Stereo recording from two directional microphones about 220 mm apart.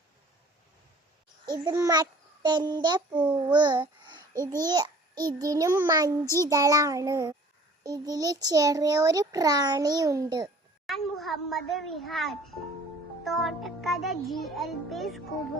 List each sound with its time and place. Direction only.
1.5 s a child's voice: 20° right (ahead or behind)
10.8 s a child's voice: centre (ahead or behind)